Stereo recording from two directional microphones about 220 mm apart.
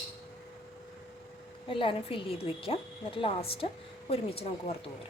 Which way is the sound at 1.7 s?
25° left (ahead or behind).